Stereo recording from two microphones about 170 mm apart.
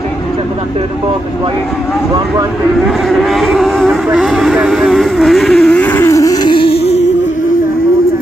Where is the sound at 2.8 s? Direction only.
Centre (ahead or behind); by 7.0 s 35° left (ahead or behind).